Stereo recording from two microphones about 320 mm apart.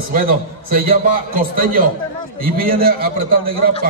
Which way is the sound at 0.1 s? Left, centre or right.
Right.